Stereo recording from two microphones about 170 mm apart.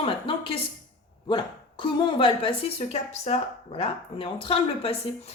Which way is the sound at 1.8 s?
30° left (ahead or behind).